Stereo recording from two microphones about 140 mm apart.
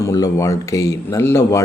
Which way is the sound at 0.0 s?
25° left (ahead or behind).